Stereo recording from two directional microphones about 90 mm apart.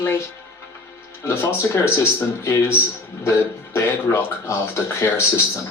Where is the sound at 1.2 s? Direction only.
30° left (ahead or behind).